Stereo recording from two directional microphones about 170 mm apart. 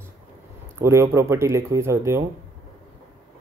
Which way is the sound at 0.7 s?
15° right (ahead or behind).